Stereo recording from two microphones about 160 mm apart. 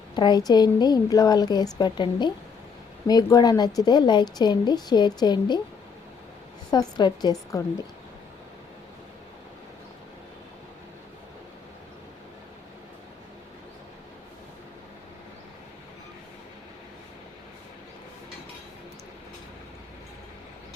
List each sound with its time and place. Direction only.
0.1 s a woman's voice: 25° left (ahead or behind)
6.7 s a woman's voice: 25° left (ahead or behind)